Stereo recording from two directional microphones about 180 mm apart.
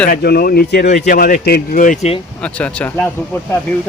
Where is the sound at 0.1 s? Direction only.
60° left (ahead or behind); by 2.2 s 35° left (ahead or behind).